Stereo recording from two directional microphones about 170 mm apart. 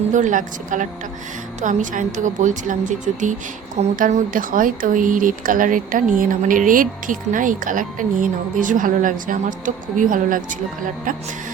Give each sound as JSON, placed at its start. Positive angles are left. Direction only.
{"t": 0.1, "sound": "speech", "side_deg": -45}